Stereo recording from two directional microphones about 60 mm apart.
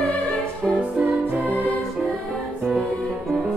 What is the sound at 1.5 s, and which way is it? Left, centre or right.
Music, left.